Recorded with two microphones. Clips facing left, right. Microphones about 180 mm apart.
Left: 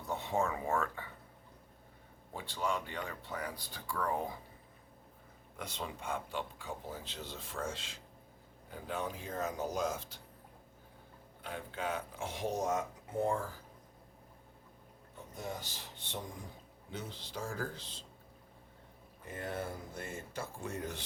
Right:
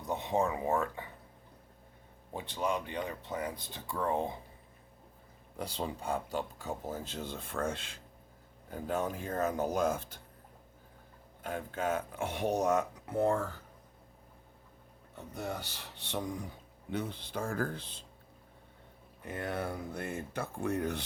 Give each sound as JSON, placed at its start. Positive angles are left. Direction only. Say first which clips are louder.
{"t": 0.0, "sound": "speech", "louder": "right 3 dB", "side_deg": -20}
{"t": 2.3, "sound": "speech", "louder": "right 3 dB", "side_deg": -20}
{"t": 5.5, "sound": "speech", "louder": "right 5 dB", "side_deg": -35}
{"t": 8.7, "sound": "speech", "louder": "right 5 dB", "side_deg": -45}
{"t": 11.4, "sound": "speech", "louder": "right 5 dB", "side_deg": -45}
{"t": 15.4, "sound": "speech", "louder": "right 4 dB", "side_deg": -65}
{"t": 16.9, "sound": "speech", "louder": "right 7 dB", "side_deg": -60}
{"t": 19.2, "sound": "speech", "louder": "right 4 dB", "side_deg": -65}